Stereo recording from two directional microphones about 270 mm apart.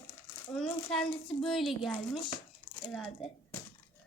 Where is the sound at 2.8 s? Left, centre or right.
Centre.